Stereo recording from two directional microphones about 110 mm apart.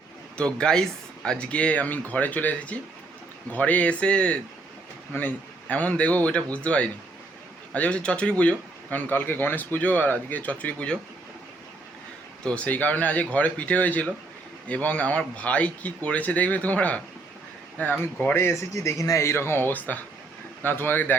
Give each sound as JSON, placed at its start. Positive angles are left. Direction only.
{"t": 0.3, "sound": "speech", "side_deg": 10}
{"t": 12.4, "sound": "a man's voice", "side_deg": 10}